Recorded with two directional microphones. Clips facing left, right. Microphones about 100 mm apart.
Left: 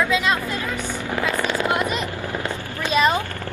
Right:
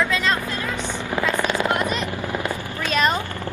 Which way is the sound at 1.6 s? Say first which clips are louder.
Left 1 dB; 20° right (ahead or behind).